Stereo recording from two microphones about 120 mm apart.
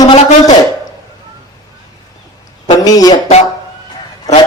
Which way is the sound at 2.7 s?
30° left (ahead or behind).